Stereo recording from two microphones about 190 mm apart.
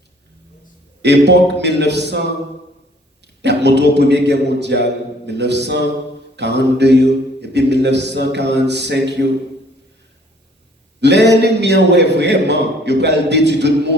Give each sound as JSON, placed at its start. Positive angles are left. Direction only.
{"t": 1.0, "sound": "a man's voice", "side_deg": -65}
{"t": 3.4, "sound": "a man's voice", "side_deg": -65}
{"t": 11.0, "sound": "a man's voice", "side_deg": -65}